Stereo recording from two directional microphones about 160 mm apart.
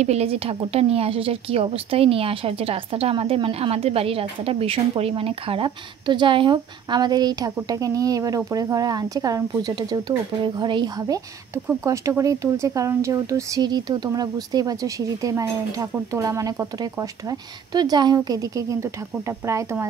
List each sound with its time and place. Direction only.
0.0 s speech: 40° right (ahead or behind); by 19.9 s 20° right (ahead or behind)